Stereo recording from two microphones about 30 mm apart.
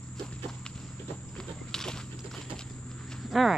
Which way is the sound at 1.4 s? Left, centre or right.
Left.